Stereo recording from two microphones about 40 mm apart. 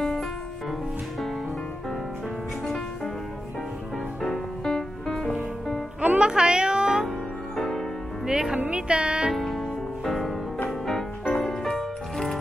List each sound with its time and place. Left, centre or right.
0.0 s music: centre
2.6 s music: centre
4.2 s music: centre
5.9 s music: right
7.5 s music: centre
8.3 s music: centre
8.6 s music: right
9.4 s music: centre